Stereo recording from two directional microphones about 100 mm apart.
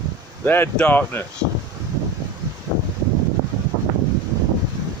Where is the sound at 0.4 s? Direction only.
20° left (ahead or behind).